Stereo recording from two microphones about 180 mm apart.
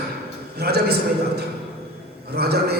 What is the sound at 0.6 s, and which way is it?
Speech, 65° right (ahead or behind).